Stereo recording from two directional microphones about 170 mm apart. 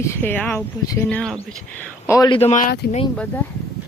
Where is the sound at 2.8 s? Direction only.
70° left (ahead or behind).